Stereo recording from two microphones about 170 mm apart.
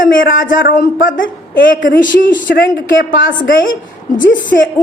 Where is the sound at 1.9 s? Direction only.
90° left.